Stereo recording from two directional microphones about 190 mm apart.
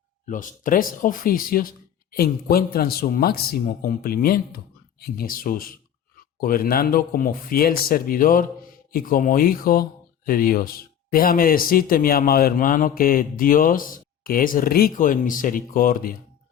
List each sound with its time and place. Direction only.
0.3 s speech: 45° left (ahead or behind)